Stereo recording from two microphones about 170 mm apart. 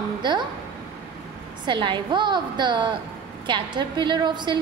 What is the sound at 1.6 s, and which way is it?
A woman's voice, 30° right (ahead or behind).